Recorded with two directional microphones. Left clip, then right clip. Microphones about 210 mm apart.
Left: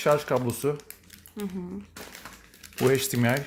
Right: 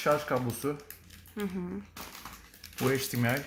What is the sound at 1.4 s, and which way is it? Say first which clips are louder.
Speech: even; centre (ahead or behind).